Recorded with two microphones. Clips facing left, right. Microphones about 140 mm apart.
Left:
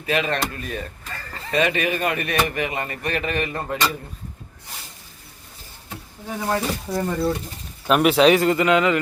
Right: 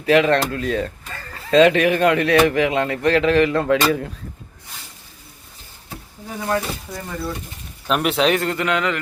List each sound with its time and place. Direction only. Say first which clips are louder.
0.0 s speech: right 8 dB; 75° right (ahead or behind)
6.5 s speech: even; 25° left (ahead or behind)
7.9 s a man's voice: left 3 dB; centre (ahead or behind)